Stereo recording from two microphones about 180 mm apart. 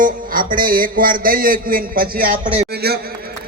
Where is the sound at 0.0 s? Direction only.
50° right (ahead or behind).